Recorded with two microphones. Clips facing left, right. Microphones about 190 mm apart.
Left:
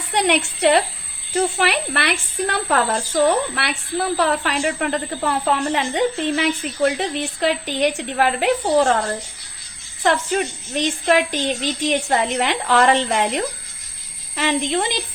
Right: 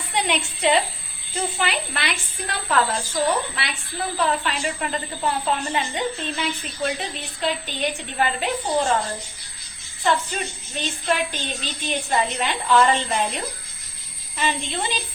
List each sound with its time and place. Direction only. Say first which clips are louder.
0.1 s a woman's voice: left 6 dB; 70° left (ahead or behind); by 14.9 s 90° left